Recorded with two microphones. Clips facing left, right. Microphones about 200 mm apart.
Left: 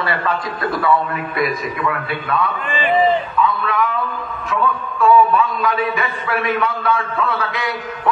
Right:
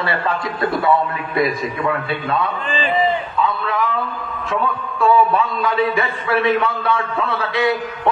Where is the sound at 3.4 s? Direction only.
30° right (ahead or behind).